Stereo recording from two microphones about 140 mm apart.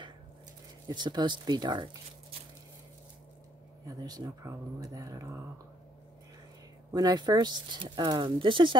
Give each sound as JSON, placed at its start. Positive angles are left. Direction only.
{"t": 0.8, "sound": "speech", "side_deg": -30}
{"t": 3.8, "sound": "speech", "side_deg": -25}
{"t": 6.9, "sound": "speech", "side_deg": -30}